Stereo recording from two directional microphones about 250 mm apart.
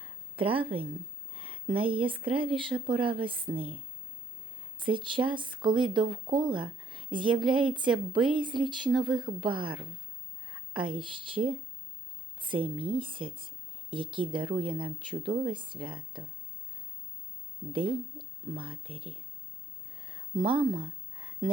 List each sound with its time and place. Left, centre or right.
0.3 s speech: right
1.3 s a sound: right
1.6 s speech: right
4.8 s speech: centre
17.7 s speech: right
20.3 s speech: centre
20.7 s a sound: centre